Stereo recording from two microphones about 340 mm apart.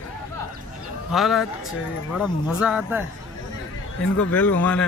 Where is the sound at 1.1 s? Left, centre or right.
Centre.